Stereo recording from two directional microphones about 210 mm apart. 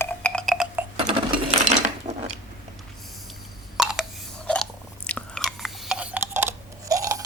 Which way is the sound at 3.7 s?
Centre (ahead or behind).